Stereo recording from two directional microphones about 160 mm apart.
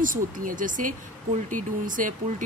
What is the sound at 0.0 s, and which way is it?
Speech, 60° right (ahead or behind).